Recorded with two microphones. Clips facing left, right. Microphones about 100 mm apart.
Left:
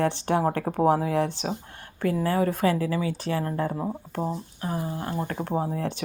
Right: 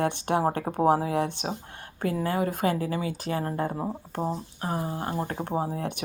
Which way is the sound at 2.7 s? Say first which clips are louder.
Left 2 dB; 35° right (ahead or behind).